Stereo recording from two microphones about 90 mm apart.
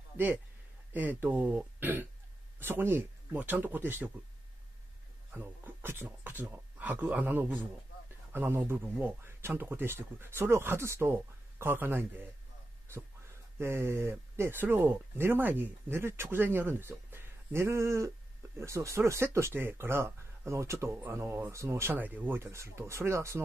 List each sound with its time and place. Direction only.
0.9 s speech: 20° right (ahead or behind)
5.3 s speech: 20° right (ahead or behind)
13.6 s speech: 30° right (ahead or behind)